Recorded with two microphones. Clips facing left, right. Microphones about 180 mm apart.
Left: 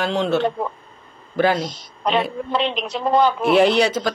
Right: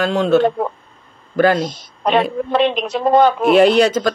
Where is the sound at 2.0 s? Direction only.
45° right (ahead or behind).